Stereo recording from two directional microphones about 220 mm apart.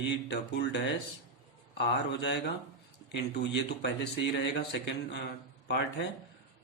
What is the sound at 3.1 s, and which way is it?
Speech, 50° left (ahead or behind).